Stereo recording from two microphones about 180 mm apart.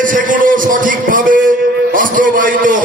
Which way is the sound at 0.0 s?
45° right (ahead or behind).